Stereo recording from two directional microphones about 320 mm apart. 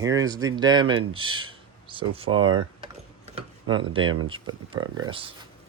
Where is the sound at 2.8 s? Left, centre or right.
Centre.